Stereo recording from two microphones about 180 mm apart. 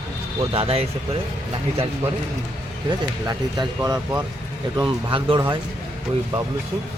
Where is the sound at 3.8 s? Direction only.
15° right (ahead or behind).